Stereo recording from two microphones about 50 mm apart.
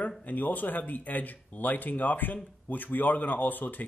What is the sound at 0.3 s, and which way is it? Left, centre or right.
Speech, left.